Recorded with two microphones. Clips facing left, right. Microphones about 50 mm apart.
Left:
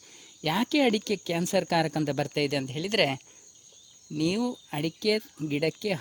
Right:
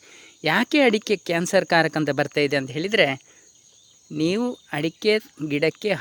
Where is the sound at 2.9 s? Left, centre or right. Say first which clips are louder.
Right 6 dB; right.